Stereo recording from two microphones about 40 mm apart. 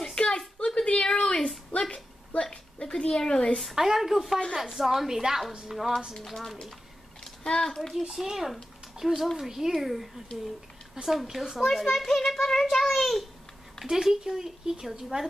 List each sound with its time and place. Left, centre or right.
0.0 s a sound: left
2.5 s a sound: centre
3.7 s a child's voice: centre
6.2 s a child's voice: centre
8.1 s speech: centre
11.6 s a child's voice: centre
13.8 s speech: centre